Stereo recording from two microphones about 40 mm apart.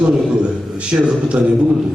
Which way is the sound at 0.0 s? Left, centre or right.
Right.